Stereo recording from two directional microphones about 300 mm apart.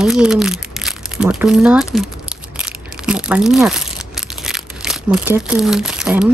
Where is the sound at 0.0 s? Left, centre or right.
Centre.